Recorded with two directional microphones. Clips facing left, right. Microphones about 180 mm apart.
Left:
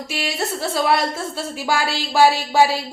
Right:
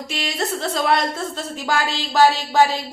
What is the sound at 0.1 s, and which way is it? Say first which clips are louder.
A woman's voice: even; 5° left (ahead or behind).